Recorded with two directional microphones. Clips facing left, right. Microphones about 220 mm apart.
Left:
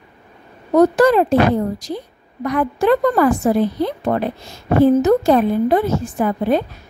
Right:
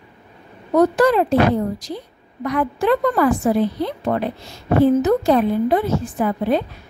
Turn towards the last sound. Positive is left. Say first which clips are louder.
# left 2 dB
turn(degrees=45)  # may be behind; listen again after turning